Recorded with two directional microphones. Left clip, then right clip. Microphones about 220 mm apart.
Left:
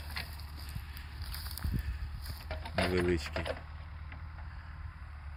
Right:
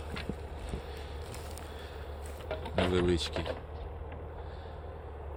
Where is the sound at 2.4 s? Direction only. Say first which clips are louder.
Right 2 dB; 40° left (ahead or behind).